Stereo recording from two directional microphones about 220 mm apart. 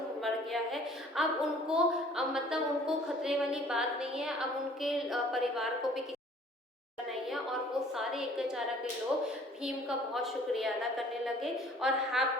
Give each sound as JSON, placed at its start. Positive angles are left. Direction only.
{"t": 0.2, "sound": "a woman's voice", "side_deg": 0}
{"t": 7.9, "sound": "a woman's voice", "side_deg": 0}
{"t": 10.2, "sound": "a woman's voice", "side_deg": 0}